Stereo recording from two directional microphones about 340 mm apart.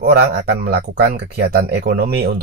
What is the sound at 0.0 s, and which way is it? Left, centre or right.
Speech, right.